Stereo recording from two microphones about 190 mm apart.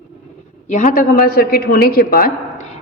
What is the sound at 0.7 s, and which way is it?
A man's voice, 40° left (ahead or behind).